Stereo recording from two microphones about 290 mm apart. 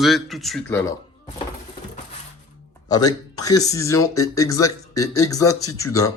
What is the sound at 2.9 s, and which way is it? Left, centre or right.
Speech, centre.